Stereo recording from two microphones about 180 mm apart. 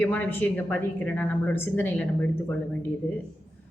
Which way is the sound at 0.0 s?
10° left (ahead or behind).